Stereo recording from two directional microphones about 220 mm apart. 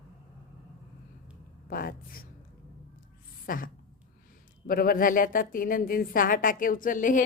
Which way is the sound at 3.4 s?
40° left (ahead or behind).